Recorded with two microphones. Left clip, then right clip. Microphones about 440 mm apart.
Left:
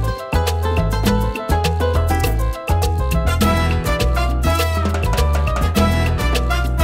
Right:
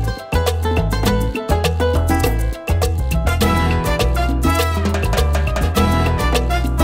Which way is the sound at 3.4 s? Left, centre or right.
Right.